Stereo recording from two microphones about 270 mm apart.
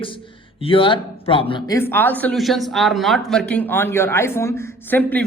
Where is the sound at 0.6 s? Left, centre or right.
Centre.